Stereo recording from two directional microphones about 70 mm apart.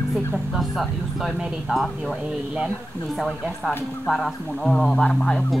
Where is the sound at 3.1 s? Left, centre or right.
Centre.